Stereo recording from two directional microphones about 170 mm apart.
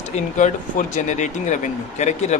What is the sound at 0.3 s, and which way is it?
Speech, 45° left (ahead or behind).